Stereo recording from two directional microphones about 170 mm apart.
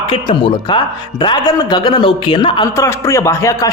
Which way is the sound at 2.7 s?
15° left (ahead or behind).